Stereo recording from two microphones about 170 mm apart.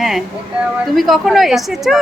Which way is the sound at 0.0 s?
Centre (ahead or behind).